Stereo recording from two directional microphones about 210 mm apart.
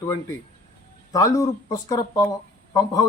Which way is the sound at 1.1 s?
15° left (ahead or behind).